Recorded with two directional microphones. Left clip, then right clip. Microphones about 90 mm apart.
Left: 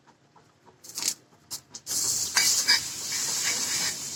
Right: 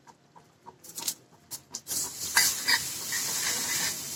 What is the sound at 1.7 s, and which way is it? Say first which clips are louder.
Stir: left 6 dB; 35° left (ahead or behind).